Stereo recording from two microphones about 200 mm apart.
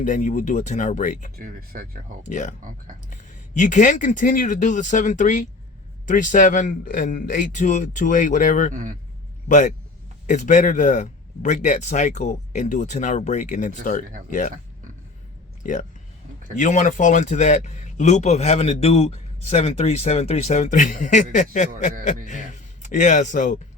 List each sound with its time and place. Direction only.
0.0 s speech: 40° left (ahead or behind)
1.4 s speech: 45° right (ahead or behind)
2.2 s speech: 35° left (ahead or behind)
2.6 s speech: 40° right (ahead or behind)
3.1 s speech: 40° left (ahead or behind)
8.7 s speech: 40° right (ahead or behind)
9.5 s speech: 40° left (ahead or behind)
15.6 s speech: 40° left (ahead or behind)